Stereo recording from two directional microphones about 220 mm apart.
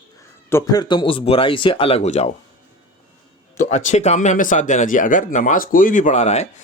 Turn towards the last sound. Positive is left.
turn(degrees=30)  # may be behind; listen again after turning